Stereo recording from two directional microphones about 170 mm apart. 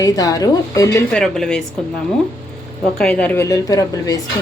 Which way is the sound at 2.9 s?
5° left (ahead or behind).